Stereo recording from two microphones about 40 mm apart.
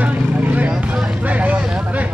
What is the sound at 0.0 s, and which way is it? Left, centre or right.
Vehicle, right.